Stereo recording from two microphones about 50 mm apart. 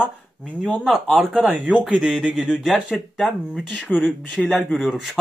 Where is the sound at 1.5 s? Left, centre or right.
Right.